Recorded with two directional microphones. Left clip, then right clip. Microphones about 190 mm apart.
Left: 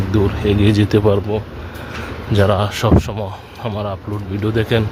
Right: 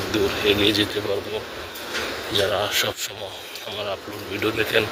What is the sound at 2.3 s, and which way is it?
Speech, 30° left (ahead or behind).